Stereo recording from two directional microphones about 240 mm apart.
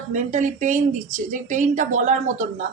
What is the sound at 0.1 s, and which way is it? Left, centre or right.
A woman's voice, right.